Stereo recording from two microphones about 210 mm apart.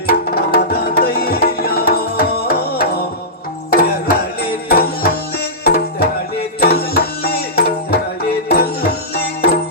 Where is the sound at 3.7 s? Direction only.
45° left (ahead or behind).